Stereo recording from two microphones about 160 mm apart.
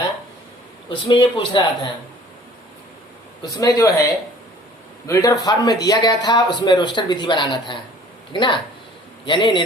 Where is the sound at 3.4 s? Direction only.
25° left (ahead or behind).